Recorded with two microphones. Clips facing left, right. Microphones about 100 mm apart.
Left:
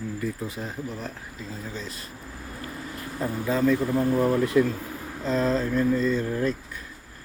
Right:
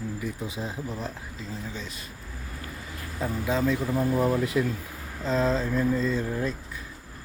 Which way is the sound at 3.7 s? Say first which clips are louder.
Left 3 dB; 20° right (ahead or behind).